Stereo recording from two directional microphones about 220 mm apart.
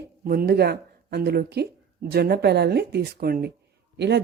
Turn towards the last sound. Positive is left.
turn(degrees=-50)  # may be behind; listen again after turning